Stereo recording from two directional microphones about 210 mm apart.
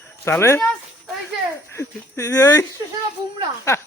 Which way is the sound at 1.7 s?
15° left (ahead or behind).